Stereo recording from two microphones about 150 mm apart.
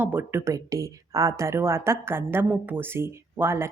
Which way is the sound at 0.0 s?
15° right (ahead or behind).